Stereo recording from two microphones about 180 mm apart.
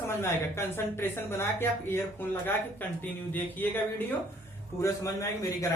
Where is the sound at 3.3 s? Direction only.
10° left (ahead or behind).